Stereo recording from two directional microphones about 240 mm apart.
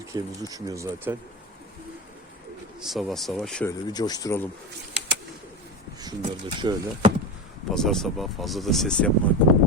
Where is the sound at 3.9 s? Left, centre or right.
Centre.